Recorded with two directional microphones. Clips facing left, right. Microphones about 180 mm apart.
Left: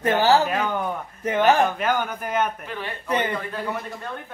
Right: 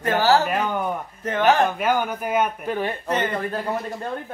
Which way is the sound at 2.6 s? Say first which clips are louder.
Right 8 dB; 45° right (ahead or behind).